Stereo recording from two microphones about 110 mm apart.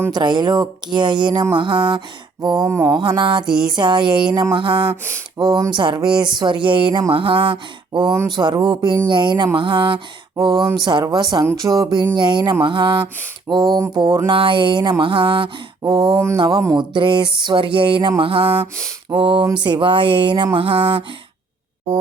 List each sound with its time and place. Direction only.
0.1 s speech: 45° right (ahead or behind)
5.4 s speech: 40° right (ahead or behind)
15.8 s speech: 40° right (ahead or behind)